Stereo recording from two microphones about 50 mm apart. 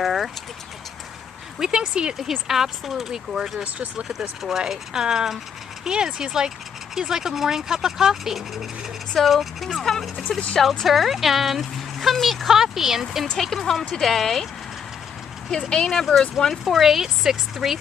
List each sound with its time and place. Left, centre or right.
0.0 s vehicle: centre
1.6 s speech: centre
2.1 s speech: centre
3.6 s speech: right
4.4 s speech: centre
10.0 s speech: centre
10.6 s speech: centre
10.9 s speech: centre
15.7 s speech: centre
16.6 s speech: centre